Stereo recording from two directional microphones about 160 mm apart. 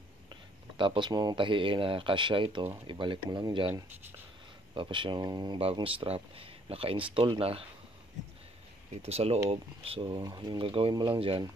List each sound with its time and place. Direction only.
0.3 s speech: 30° right (ahead or behind)
9.0 s speech: 40° right (ahead or behind)